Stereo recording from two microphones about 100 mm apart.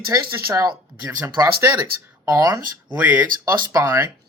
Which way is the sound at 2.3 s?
35° right (ahead or behind).